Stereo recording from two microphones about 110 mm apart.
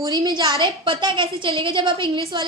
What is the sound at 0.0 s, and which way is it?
A woman's voice, 35° right (ahead or behind).